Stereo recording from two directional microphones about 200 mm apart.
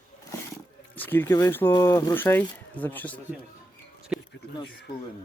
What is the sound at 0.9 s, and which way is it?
Speech, 10° left (ahead or behind).